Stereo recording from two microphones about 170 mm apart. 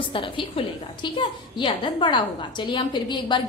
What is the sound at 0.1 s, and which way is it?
A woman's voice, 30° left (ahead or behind).